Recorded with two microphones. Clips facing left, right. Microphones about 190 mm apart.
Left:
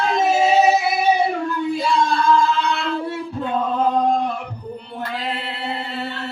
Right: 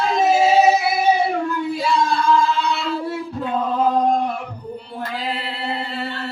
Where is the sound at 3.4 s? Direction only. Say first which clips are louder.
Even; centre (ahead or behind).